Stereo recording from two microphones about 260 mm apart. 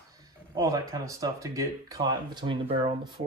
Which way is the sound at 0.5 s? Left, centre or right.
Centre.